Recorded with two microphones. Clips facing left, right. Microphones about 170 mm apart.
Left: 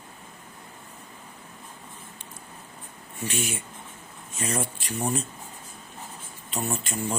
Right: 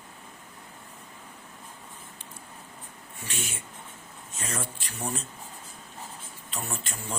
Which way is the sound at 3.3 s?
15° left (ahead or behind).